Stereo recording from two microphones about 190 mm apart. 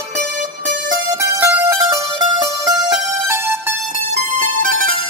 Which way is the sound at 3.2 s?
15° right (ahead or behind).